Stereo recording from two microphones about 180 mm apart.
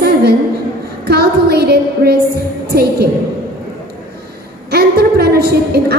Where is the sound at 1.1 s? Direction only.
60° right (ahead or behind).